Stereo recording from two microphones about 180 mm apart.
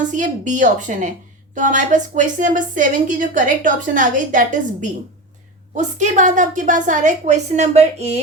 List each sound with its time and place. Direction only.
0.1 s a woman's voice: 45° right (ahead or behind)